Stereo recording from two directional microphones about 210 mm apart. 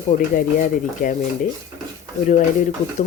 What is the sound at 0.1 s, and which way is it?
A woman's voice, 40° left (ahead or behind).